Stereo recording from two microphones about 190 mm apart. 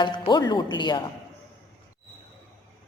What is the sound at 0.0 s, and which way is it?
A man's voice, 25° left (ahead or behind).